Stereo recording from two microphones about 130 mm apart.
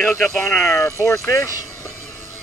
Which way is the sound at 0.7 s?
20° left (ahead or behind).